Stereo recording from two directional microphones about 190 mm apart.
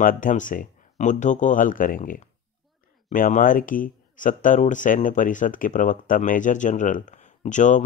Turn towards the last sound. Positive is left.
turn(degrees=40)  # may be behind; listen again after turning